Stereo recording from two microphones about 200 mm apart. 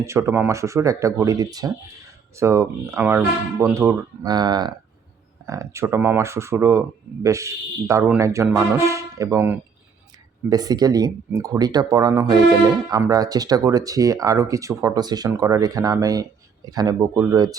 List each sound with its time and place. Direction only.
0.0 s speech: 15° right (ahead or behind)